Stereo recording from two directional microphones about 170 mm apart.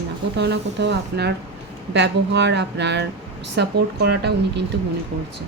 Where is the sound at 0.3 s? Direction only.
85° right.